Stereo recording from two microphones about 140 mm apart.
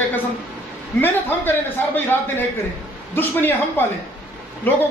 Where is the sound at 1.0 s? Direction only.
15° left (ahead or behind).